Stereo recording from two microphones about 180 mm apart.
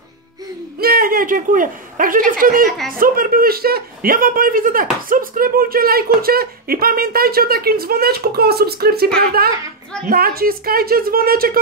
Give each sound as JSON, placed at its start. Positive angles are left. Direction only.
{"t": 0.7, "sound": "a man's voice", "side_deg": -55}